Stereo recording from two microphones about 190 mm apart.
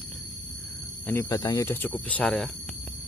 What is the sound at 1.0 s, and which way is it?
Speech, 15° left (ahead or behind).